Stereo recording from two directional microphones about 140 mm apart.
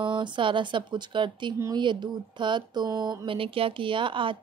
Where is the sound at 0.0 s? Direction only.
35° right (ahead or behind).